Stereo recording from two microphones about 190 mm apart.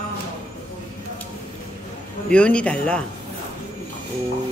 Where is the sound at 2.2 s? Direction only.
5° left (ahead or behind).